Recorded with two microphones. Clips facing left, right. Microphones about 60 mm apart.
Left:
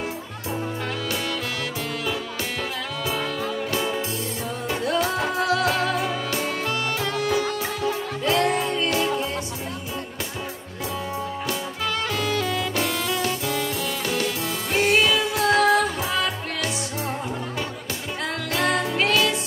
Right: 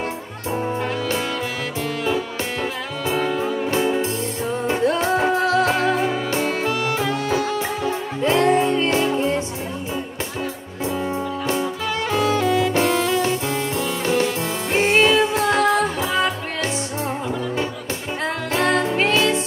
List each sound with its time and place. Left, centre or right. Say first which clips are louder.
2.0 s music: right 5 dB; right
6.9 s music: right 3 dB; centre
7.3 s music: right 3 dB; right
12.1 s music: right 6 dB; right
12.4 s music: right 6 dB; centre
12.7 s music: right 6 dB; right
18.2 s music: right 3 dB; right